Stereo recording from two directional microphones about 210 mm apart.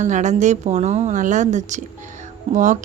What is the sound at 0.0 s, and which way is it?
A woman's voice, 35° right (ahead or behind).